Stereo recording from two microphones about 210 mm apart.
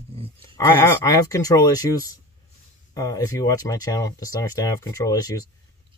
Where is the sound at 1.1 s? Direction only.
15° left (ahead or behind).